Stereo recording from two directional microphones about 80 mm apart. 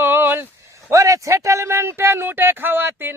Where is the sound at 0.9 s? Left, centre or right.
Right.